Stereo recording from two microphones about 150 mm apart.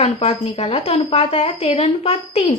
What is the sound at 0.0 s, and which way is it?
Speech, 45° left (ahead or behind).